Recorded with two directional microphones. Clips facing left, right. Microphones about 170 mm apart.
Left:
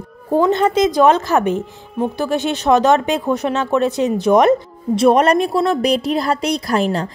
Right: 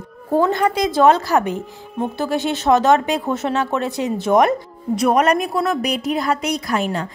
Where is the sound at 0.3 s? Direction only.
20° left (ahead or behind).